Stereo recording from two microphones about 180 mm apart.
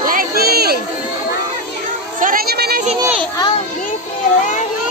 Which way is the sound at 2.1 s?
50° right (ahead or behind).